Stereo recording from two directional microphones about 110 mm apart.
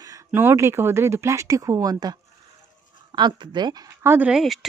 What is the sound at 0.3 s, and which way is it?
Speech, 20° right (ahead or behind).